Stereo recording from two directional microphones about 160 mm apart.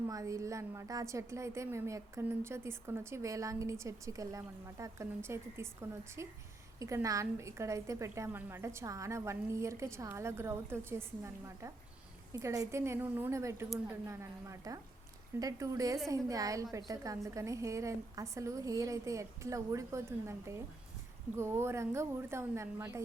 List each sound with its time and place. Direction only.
0.1 s a woman's voice: 20° right (ahead or behind)